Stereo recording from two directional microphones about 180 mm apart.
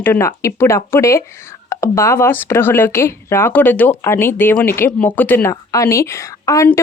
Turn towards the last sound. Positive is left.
turn(degrees=15)  # may be behind; listen again after turning